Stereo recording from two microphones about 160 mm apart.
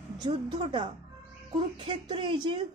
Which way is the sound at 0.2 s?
30° right (ahead or behind).